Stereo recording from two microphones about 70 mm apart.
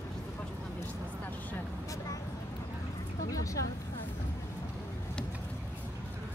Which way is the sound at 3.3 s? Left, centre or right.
Left.